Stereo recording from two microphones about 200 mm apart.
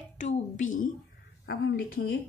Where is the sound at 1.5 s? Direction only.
55° left (ahead or behind).